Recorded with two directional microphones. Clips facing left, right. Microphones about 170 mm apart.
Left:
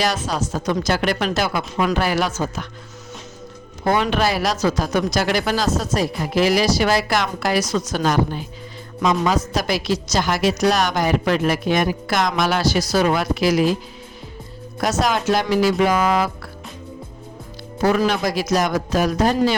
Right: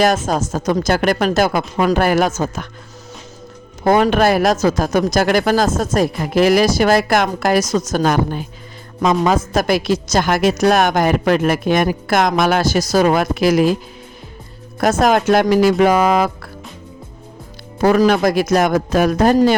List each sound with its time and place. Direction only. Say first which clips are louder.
0.0 s a woman's voice: right 6 dB; 50° right (ahead or behind)
3.8 s a woman's voice: right 6 dB; 45° right (ahead or behind)
14.8 s a woman's voice: right 6 dB; 50° right (ahead or behind)
17.8 s a woman's voice: right 6 dB; 50° right (ahead or behind)